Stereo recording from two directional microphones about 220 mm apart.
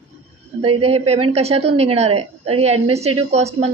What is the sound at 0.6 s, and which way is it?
A woman's voice, 25° right (ahead or behind).